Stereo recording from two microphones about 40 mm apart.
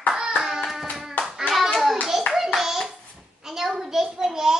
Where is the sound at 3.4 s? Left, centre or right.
Centre.